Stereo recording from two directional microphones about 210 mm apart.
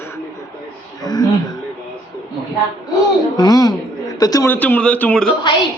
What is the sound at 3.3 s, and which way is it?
A man's voice, 20° left (ahead or behind).